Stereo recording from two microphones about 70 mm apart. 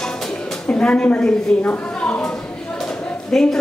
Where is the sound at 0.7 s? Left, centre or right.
Centre.